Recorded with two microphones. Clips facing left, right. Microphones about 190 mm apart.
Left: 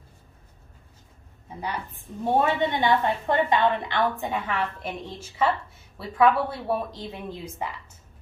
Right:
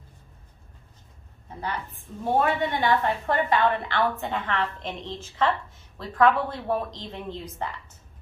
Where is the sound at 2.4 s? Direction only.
20° left (ahead or behind).